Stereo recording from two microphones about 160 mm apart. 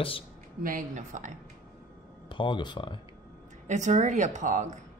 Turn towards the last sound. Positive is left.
turn(degrees=-50)  # may be behind; listen again after turning